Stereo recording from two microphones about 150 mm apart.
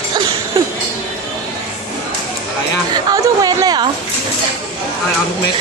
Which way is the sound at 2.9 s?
25° right (ahead or behind).